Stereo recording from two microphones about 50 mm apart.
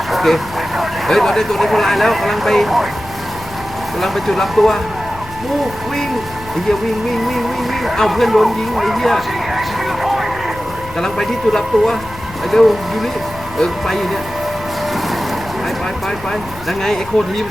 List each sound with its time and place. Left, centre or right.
0.1 s vehicle: centre
0.8 s speech: centre
4.0 s speech: centre
6.7 s speech: centre
11.0 s speech: centre
16.3 s speech: centre